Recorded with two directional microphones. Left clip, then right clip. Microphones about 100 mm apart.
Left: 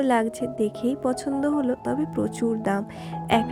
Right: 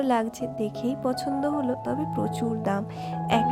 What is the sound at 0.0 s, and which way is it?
A woman's voice, 30° left (ahead or behind).